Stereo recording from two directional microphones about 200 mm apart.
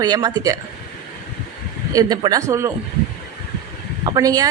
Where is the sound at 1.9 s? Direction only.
20° right (ahead or behind).